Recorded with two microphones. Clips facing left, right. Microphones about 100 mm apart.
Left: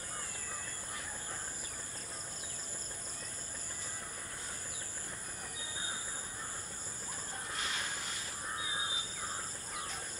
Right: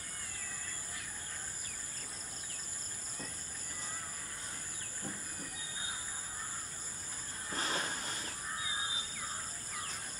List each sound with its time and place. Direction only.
7.5 s train: 35° right (ahead or behind)